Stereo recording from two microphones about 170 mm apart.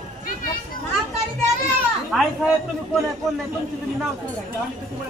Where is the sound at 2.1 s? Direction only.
Centre (ahead or behind).